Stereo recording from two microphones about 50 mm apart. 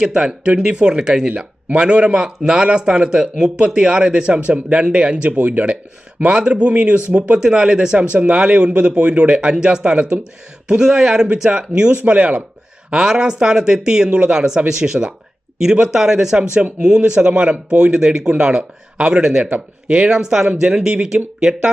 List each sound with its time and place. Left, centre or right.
0.0 s speech: centre
18.0 s speech: centre
19.5 s speech: right